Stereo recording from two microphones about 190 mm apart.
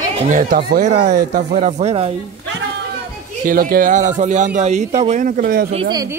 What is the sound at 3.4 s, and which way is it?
Speech, 50° right (ahead or behind).